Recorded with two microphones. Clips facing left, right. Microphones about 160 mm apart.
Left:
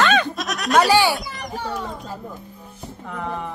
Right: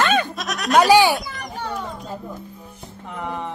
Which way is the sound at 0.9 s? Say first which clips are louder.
Right 3 dB; 15° right (ahead or behind).